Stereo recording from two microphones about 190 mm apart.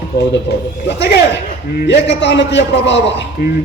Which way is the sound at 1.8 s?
65° left (ahead or behind).